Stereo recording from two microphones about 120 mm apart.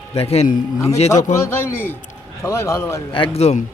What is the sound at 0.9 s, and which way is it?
Speech, 70° left (ahead or behind).